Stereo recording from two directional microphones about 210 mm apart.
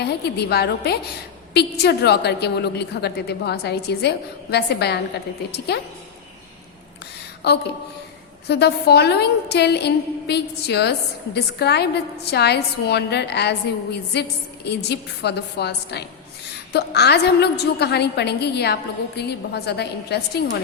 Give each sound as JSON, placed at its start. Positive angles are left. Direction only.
{"t": 0.0, "sound": "a woman's voice", "side_deg": 50}
{"t": 7.4, "sound": "a woman's voice", "side_deg": 50}